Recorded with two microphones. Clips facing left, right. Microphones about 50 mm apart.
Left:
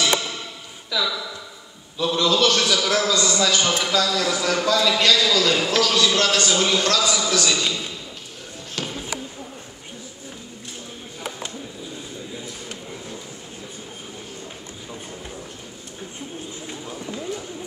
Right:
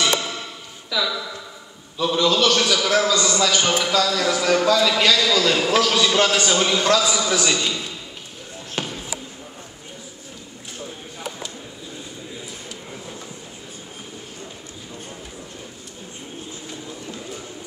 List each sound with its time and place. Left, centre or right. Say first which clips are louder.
0.8 s a man's voice: right 1 dB; centre; by 7.6 s right
8.8 s basketball bounce: right 2 dB; right